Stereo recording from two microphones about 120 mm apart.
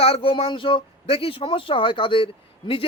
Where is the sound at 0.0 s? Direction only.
50° left (ahead or behind).